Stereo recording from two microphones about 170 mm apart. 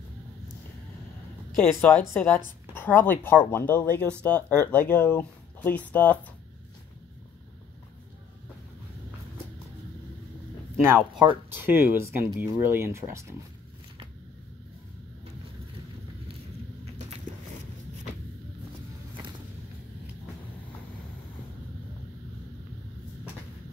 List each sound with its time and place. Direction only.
1.5 s speech: 10° left (ahead or behind)
11.5 s speech: 15° right (ahead or behind)